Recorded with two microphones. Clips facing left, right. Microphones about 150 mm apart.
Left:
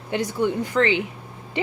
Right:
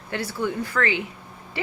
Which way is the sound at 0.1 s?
15° left (ahead or behind).